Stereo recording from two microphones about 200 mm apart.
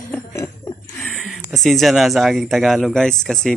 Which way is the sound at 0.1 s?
15° left (ahead or behind).